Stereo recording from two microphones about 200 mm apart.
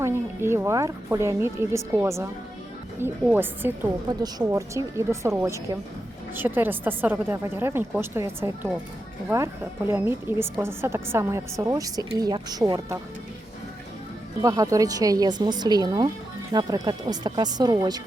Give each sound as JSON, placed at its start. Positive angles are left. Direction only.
{"t": 0.0, "sound": "a woman's voice", "side_deg": -10}
{"t": 14.4, "sound": "speech", "side_deg": -15}